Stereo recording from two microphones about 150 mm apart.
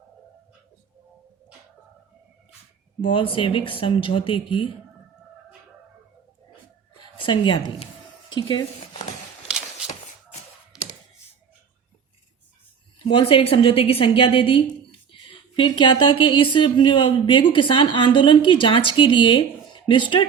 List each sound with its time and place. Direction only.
3.0 s a woman's voice: 35° left (ahead or behind)
7.0 s a woman's voice: 35° left (ahead or behind)
10.7 s a sound: 5° right (ahead or behind)
13.1 s a woman's voice: 35° left (ahead or behind)